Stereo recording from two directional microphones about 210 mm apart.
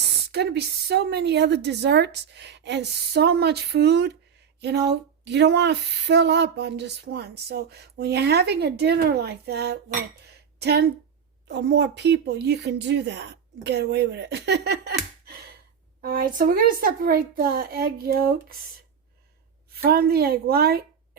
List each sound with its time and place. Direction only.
0.3 s speech: 50° right (ahead or behind)
19.8 s speech: 45° right (ahead or behind)